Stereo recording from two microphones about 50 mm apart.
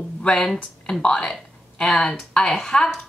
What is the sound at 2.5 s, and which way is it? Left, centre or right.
Speech, centre.